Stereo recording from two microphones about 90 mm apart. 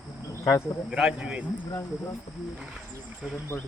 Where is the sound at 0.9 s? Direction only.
10° right (ahead or behind).